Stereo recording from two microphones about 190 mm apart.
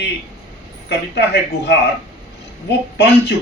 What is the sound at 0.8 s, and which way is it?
A man's voice, 60° left (ahead or behind).